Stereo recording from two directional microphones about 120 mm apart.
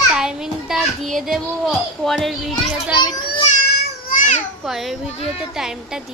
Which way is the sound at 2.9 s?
40° left (ahead or behind).